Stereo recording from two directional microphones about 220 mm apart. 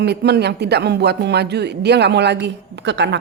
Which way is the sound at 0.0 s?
50° right (ahead or behind).